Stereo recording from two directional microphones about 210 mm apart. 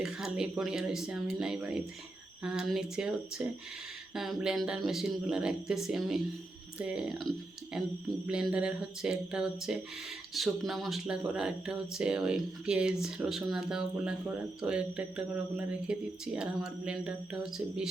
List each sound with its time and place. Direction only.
0.0 s speech: 5° right (ahead or behind)